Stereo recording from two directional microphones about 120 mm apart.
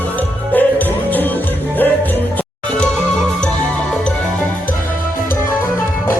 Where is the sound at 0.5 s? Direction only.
15° left (ahead or behind).